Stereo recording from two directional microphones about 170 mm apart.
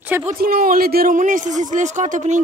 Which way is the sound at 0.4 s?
60° right (ahead or behind).